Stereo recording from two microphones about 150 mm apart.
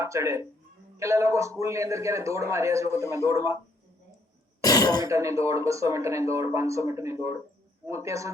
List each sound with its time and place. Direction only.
0.0 s speech: 20° right (ahead or behind)
4.6 s throat clearing: 25° left (ahead or behind)
5.0 s speech: 20° right (ahead or behind)